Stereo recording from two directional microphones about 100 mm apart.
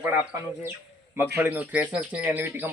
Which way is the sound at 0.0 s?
20° right (ahead or behind).